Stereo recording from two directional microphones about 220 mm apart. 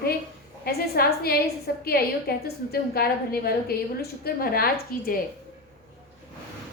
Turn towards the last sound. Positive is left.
turn(degrees=40)  # may be behind; listen again after turning